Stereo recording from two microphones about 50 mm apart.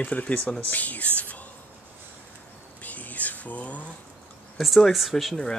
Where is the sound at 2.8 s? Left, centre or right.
Left.